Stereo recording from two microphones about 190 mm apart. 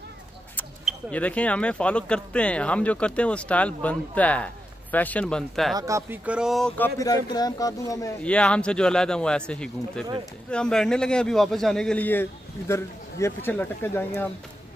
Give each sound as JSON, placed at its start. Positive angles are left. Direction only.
{"t": 0.6, "sound": "speech", "side_deg": 5}
{"t": 5.8, "sound": "speech", "side_deg": -15}
{"t": 7.0, "sound": "speech", "side_deg": 20}
{"t": 8.2, "sound": "a man's voice", "side_deg": 5}